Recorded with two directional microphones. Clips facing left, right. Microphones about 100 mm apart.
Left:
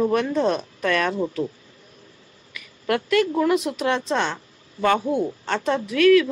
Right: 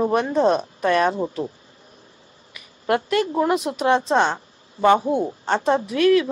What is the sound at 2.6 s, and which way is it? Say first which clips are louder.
A woman's voice: right 2 dB; 30° right (ahead or behind).